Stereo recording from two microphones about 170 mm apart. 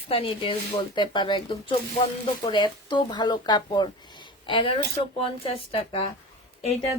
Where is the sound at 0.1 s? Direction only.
35° left (ahead or behind).